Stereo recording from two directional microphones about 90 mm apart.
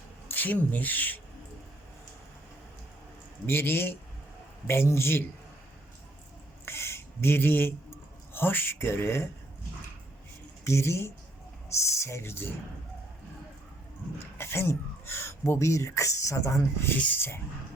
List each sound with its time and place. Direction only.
0.3 s speech: 20° left (ahead or behind)
3.4 s speech: 25° left (ahead or behind)
6.7 s a sound: 30° left (ahead or behind)
8.3 s speech: 25° left (ahead or behind)
10.6 s speech: 30° left (ahead or behind)
14.3 s speech: 25° left (ahead or behind)